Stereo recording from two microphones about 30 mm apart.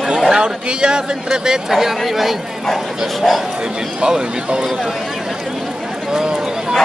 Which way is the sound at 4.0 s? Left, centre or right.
Right.